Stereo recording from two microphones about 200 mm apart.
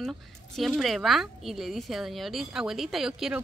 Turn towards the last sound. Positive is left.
turn(degrees=0)  # may be behind; listen again after turning